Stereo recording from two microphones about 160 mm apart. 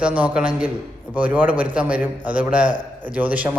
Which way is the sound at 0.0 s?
10° right (ahead or behind).